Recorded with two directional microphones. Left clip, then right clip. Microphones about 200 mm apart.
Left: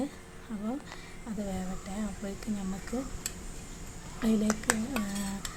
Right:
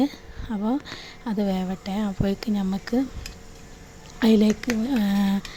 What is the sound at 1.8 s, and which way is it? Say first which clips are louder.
Speech: right 11 dB; 35° right (ahead or behind).